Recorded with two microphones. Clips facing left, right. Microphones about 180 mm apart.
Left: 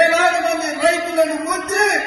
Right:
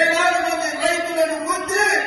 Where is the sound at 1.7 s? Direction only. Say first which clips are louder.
Left 3 dB; 65° left (ahead or behind).